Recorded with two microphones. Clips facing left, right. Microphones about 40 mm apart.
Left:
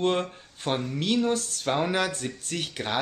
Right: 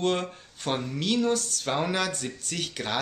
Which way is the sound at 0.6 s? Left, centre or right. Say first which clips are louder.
Left 1 dB; centre.